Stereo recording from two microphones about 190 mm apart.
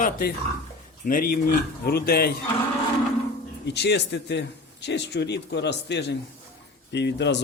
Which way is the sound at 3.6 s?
60° left (ahead or behind).